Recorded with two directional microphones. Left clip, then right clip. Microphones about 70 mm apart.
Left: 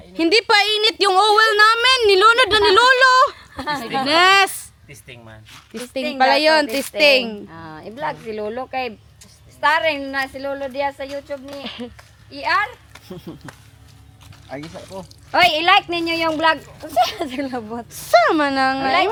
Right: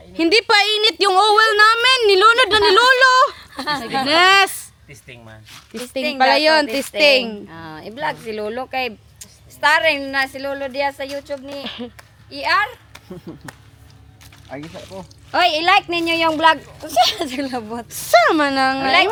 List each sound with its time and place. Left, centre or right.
0.1 s speech: centre
3.3 s a sound: right
4.0 s speech: centre
4.9 s speech: centre
5.5 s speech: centre
7.4 s a woman's voice: right
11.6 s speech: centre
12.3 s a child's voice: right
14.5 s speech: left
15.4 s a woman's voice: right; by 18.9 s centre